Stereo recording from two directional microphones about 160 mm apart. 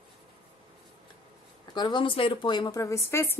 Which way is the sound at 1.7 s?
25° left (ahead or behind).